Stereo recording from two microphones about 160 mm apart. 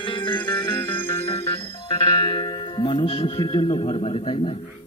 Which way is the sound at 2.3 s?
30° left (ahead or behind).